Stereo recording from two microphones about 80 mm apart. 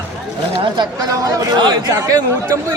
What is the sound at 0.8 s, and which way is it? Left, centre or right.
Speech, right.